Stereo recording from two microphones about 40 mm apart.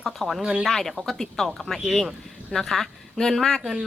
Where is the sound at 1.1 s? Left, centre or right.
Centre.